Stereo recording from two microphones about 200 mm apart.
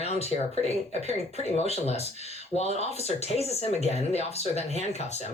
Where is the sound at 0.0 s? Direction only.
30° left (ahead or behind).